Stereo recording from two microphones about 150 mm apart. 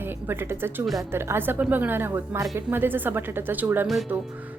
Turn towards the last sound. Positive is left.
turn(degrees=-15)  # may be behind; listen again after turning